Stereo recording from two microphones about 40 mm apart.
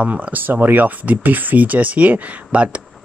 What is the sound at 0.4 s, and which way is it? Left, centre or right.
Speech, right.